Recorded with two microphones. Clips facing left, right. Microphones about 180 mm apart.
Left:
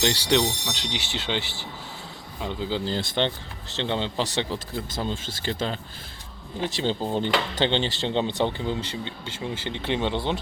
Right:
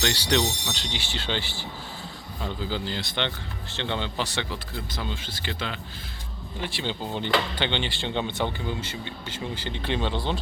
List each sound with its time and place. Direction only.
0.0 s speech: 25° left (ahead or behind)
2.8 s speech: 45° left (ahead or behind)
3.8 s speech: 30° left (ahead or behind)
5.1 s speech: 30° left (ahead or behind)